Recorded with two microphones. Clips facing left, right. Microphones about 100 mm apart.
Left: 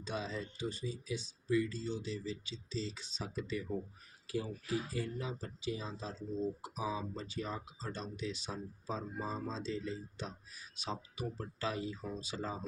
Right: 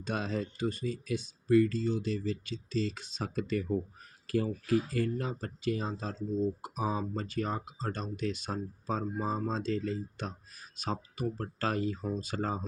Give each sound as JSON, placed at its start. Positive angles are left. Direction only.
{"t": 0.0, "sound": "speech", "side_deg": -60}